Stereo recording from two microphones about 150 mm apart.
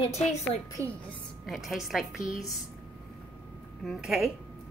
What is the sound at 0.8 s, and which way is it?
Speech, 20° right (ahead or behind).